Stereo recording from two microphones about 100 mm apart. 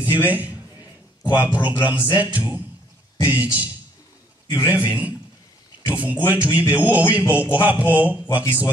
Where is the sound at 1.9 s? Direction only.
50° left (ahead or behind).